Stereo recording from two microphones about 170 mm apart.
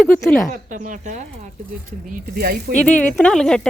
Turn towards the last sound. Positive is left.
turn(degrees=5)  # may be behind; listen again after turning